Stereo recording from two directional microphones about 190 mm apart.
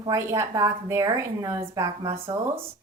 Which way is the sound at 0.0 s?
15° right (ahead or behind).